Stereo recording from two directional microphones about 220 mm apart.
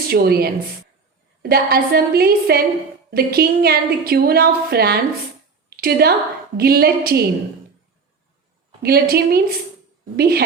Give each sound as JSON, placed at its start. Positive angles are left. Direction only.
{"t": 0.1, "sound": "a woman's voice", "side_deg": -45}
{"t": 8.8, "sound": "a woman's voice", "side_deg": -45}